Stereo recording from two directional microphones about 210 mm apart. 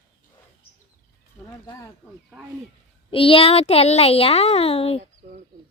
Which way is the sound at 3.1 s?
25° left (ahead or behind).